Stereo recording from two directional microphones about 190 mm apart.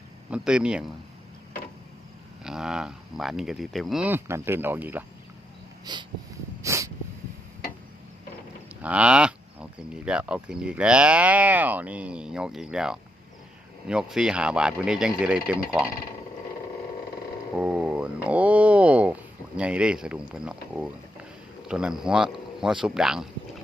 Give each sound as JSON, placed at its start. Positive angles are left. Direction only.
{"t": 0.3, "sound": "speech", "side_deg": -5}
{"t": 2.4, "sound": "speech", "side_deg": -5}
{"t": 5.8, "sound": "a sound", "side_deg": -25}
{"t": 8.8, "sound": "speech", "side_deg": -5}
{"t": 17.6, "sound": "speech", "side_deg": -5}